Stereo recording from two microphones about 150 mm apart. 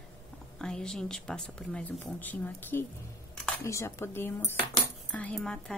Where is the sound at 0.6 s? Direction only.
5° left (ahead or behind).